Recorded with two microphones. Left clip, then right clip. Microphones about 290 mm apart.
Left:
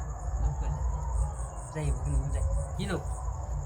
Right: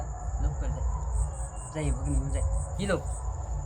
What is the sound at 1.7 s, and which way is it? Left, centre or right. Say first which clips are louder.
Speech: right 4 dB; centre.